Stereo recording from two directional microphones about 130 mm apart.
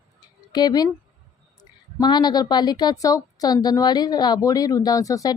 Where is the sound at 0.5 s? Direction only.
30° left (ahead or behind).